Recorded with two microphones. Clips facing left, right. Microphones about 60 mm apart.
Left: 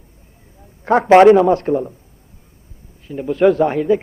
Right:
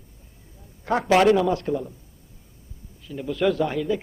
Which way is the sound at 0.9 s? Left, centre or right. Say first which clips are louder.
Left 10 dB; left.